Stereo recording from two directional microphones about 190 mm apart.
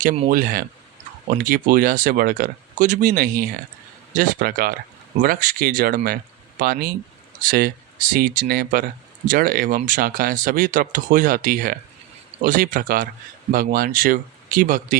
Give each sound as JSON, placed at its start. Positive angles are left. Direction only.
{"t": 0.0, "sound": "speech", "side_deg": -45}